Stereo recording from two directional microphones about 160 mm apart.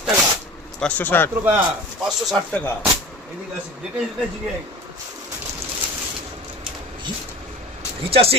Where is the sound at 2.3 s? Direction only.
10° left (ahead or behind).